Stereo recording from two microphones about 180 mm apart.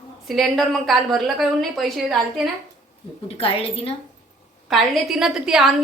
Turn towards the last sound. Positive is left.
turn(degrees=0)  # may be behind; listen again after turning